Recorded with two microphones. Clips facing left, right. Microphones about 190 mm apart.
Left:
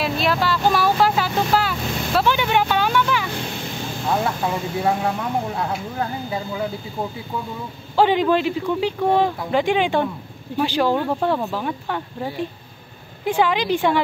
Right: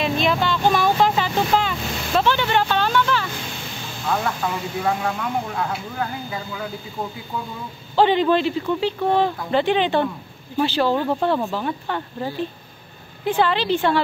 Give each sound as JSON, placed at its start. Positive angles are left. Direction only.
{"t": 0.0, "sound": "vehicle", "side_deg": 5}
{"t": 4.8, "sound": "speech", "side_deg": 25}
{"t": 7.9, "sound": "speech", "side_deg": 10}